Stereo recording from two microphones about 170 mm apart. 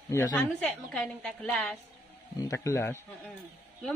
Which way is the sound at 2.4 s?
20° left (ahead or behind).